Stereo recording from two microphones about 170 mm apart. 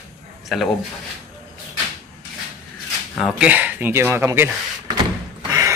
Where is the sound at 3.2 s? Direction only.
5° right (ahead or behind).